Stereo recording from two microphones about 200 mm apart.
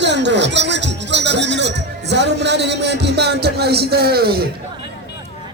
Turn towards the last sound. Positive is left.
turn(degrees=-50)  # may be behind; listen again after turning